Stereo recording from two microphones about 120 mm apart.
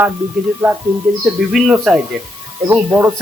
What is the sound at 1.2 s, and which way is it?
Speech, 5° right (ahead or behind).